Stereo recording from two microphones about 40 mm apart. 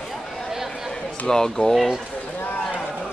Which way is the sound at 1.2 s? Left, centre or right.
Centre.